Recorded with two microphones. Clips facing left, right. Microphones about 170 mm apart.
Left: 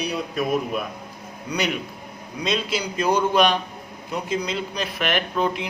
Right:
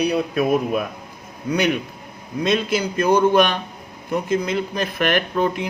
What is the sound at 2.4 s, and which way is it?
Speech, 55° right (ahead or behind).